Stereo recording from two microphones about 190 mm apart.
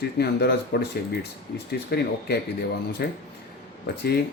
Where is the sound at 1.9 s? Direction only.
55° left (ahead or behind).